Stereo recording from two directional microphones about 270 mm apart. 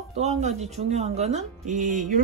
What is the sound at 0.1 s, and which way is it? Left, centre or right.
Speech, right.